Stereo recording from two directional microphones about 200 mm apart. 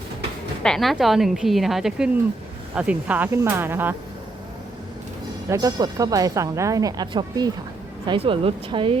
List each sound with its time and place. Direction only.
0.6 s a woman's voice: centre (ahead or behind)
5.5 s speech: 15° right (ahead or behind)